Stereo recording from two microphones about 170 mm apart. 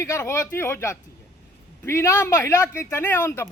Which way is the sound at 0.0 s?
15° left (ahead or behind).